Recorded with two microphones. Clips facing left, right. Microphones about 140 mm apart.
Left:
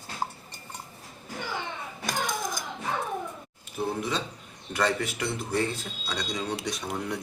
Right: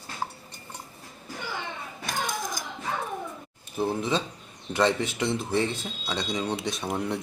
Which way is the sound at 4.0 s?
25° right (ahead or behind).